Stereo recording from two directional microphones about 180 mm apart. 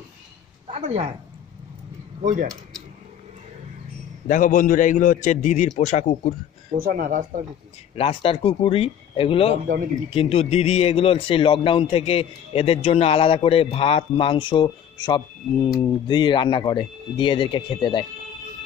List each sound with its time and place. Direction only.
0.7 s a woman's voice: 35° right (ahead or behind)
4.3 s a man's voice: 45° left (ahead or behind)
6.8 s speech: 50° right (ahead or behind)
7.9 s speech: 30° left (ahead or behind)